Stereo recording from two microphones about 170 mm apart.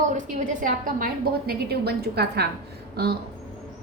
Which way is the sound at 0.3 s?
50° right (ahead or behind).